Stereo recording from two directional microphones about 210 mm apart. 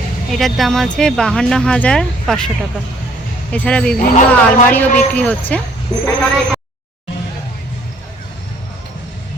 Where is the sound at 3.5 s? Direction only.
5° left (ahead or behind).